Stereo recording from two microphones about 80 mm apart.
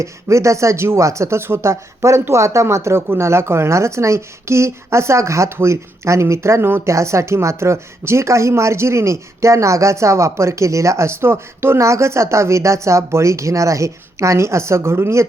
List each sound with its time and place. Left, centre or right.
0.0 s speech: right